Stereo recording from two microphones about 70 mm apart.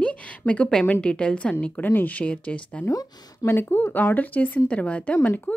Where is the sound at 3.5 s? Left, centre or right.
Left.